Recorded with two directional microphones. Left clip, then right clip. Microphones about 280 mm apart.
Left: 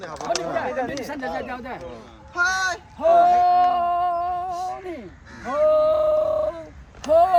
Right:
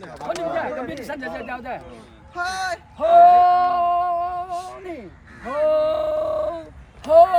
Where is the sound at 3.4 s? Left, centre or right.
Centre.